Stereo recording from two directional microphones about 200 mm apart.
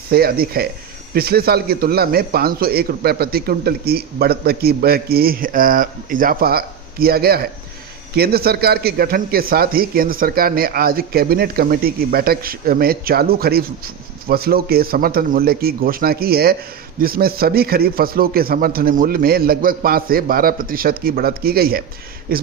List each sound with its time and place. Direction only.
0.1 s a man's voice: 50° right (ahead or behind)